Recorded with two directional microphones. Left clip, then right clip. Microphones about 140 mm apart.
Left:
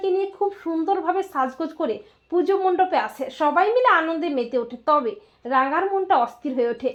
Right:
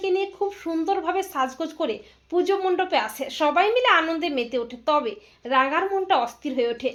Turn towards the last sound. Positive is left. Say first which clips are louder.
# left 1 dB
turn(degrees=30)  # may be behind; listen again after turning